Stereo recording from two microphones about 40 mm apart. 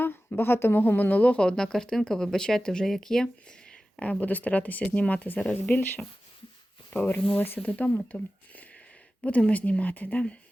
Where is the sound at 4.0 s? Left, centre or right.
Left.